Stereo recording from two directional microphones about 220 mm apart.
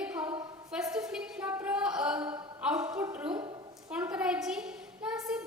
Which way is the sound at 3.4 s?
20° right (ahead or behind).